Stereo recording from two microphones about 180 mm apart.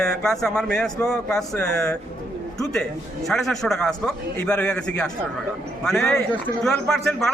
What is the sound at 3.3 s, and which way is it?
Speech, centre (ahead or behind).